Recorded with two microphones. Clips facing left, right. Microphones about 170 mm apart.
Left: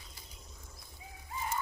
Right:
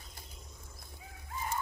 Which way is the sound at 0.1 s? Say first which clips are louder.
Right 2 dB; 50° right (ahead or behind).